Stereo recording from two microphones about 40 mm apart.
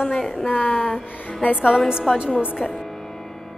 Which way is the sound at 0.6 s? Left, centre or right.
Left.